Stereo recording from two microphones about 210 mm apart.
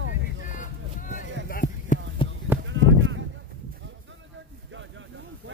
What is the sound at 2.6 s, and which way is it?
Sheep, 65° right (ahead or behind).